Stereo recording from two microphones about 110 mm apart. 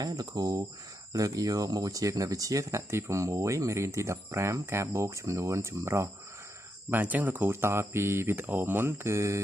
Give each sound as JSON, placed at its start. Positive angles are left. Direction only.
{"t": 0.0, "sound": "speech", "side_deg": -35}